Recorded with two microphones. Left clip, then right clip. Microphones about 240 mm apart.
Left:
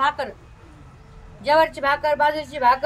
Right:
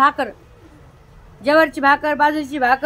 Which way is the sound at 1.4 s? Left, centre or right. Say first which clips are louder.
Right 4 dB; centre.